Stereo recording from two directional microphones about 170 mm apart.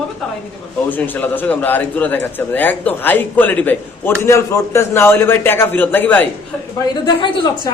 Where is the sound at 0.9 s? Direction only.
10° left (ahead or behind).